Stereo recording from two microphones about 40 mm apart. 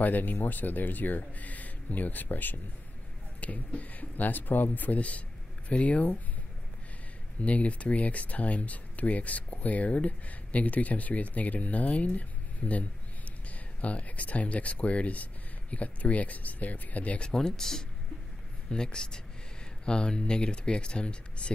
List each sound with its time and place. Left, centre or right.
0.0 s speech: left
3.3 s speech: left
7.4 s speech: left
17.3 s speech: centre